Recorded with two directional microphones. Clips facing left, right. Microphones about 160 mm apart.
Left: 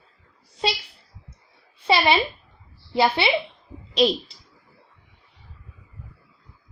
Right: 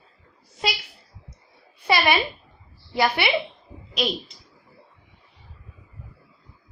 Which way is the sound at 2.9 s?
25° left (ahead or behind).